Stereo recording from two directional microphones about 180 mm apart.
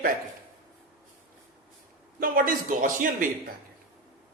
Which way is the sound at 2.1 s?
50° right (ahead or behind).